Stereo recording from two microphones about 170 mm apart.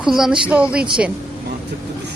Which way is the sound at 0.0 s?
5° right (ahead or behind).